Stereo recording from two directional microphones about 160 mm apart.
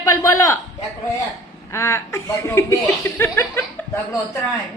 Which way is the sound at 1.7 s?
15° left (ahead or behind).